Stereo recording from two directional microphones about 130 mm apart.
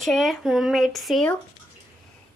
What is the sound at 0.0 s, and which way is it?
Speech, centre (ahead or behind).